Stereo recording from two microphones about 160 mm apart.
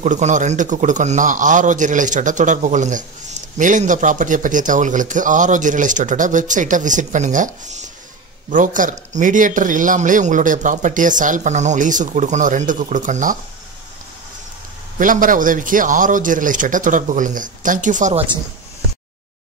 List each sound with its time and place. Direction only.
0.0 s a man's voice: 50° right (ahead or behind)
15.0 s speech: 55° right (ahead or behind)